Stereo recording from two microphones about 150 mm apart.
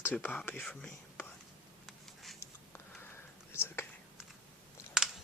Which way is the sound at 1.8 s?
Centre (ahead or behind).